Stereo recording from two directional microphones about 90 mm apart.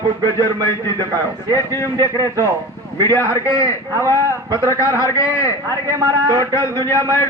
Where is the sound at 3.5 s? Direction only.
35° left (ahead or behind).